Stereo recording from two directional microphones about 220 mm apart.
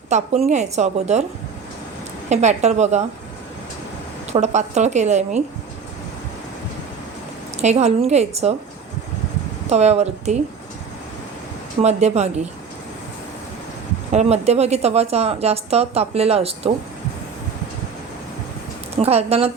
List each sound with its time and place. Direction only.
0.1 s a woman's voice: 30° right (ahead or behind)
2.3 s a woman's voice: 30° right (ahead or behind)
4.3 s a woman's voice: 30° right (ahead or behind)
7.6 s a woman's voice: 30° right (ahead or behind)
9.6 s a woman's voice: 30° right (ahead or behind)
11.8 s a woman's voice: 30° right (ahead or behind)
14.1 s a woman's voice: 30° right (ahead or behind)
18.9 s a woman's voice: 30° right (ahead or behind)